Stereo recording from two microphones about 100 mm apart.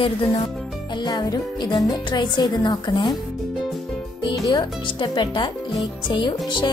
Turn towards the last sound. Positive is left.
turn(degrees=50)  # may be behind; listen again after turning